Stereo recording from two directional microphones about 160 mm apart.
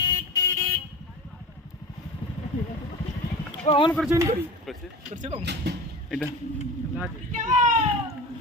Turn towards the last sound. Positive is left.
turn(degrees=-50)  # may be behind; listen again after turning